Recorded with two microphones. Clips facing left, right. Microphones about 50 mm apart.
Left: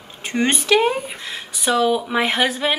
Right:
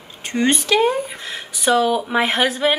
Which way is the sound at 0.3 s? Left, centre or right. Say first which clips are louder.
Even; left.